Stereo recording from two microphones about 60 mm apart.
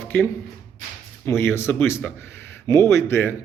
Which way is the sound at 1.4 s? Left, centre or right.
Left.